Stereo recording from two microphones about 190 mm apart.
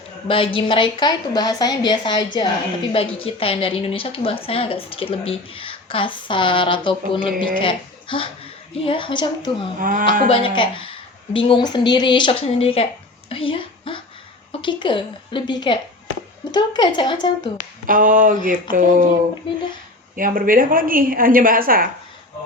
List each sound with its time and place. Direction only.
0.3 s a woman's voice: 30° left (ahead or behind)
9.7 s a woman's voice: 45° right (ahead or behind)
10.3 s a woman's voice: 25° left (ahead or behind)
17.8 s a woman's voice: 45° right (ahead or behind)
19.5 s a woman's voice: 25° left (ahead or behind)
20.1 s a woman's voice: 45° right (ahead or behind)